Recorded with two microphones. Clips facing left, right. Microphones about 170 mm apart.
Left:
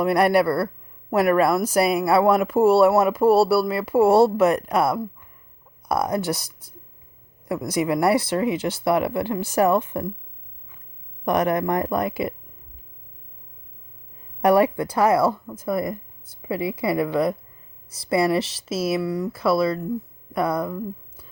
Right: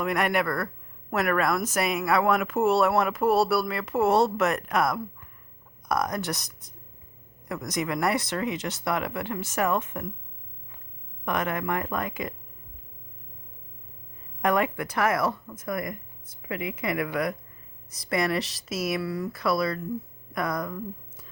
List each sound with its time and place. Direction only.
0.0 s speech: 35° left (ahead or behind)
11.3 s speech: 35° left (ahead or behind)
14.4 s speech: 35° left (ahead or behind)